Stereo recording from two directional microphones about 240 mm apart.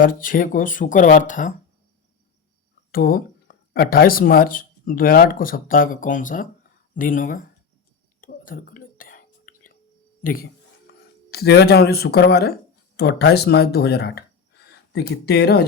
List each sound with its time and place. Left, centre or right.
0.0 s speech: left
2.9 s speech: left
8.2 s whispering: left
10.2 s speech: left